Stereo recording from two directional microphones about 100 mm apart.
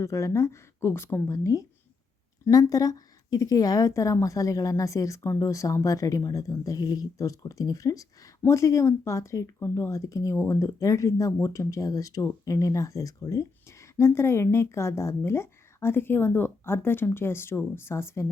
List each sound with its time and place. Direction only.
0.0 s a woman's voice: 30° left (ahead or behind)